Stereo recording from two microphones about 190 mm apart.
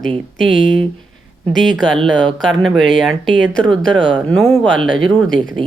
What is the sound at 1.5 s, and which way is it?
Speech, centre (ahead or behind).